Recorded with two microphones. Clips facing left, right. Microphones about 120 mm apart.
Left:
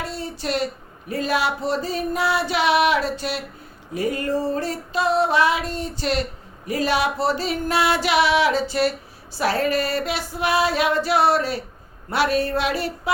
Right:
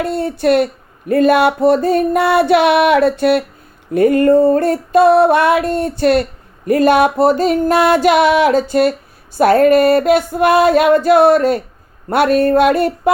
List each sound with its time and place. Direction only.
0.0 s speech: 55° right (ahead or behind)
6.7 s music: 55° right (ahead or behind)